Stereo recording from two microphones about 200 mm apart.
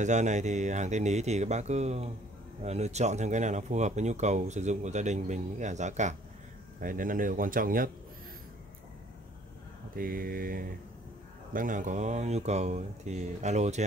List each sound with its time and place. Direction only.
0.0 s speech: 35° right (ahead or behind)
9.9 s speech: 45° right (ahead or behind)